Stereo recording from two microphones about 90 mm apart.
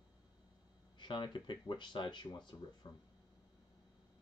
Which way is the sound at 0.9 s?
60° left (ahead or behind).